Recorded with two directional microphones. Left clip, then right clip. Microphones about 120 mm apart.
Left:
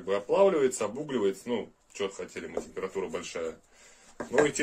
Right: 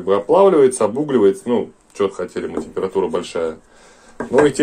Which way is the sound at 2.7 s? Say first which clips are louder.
Right 16 dB; 20° right (ahead or behind).